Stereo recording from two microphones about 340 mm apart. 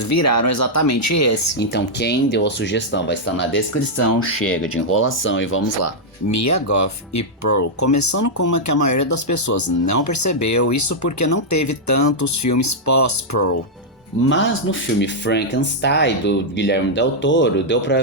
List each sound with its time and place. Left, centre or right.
0.0 s speech: left
1.5 s speech: left
4.4 s speech: centre
4.7 s speech: left
14.3 s speech: left